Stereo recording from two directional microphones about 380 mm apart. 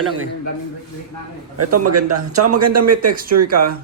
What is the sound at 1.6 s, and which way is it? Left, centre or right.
A man's voice, right.